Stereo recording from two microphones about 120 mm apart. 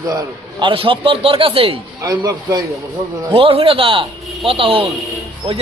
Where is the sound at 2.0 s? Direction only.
30° right (ahead or behind).